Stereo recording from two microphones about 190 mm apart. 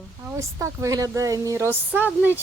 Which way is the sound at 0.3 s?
15° right (ahead or behind).